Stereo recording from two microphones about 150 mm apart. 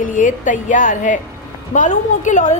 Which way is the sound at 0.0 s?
60° left (ahead or behind).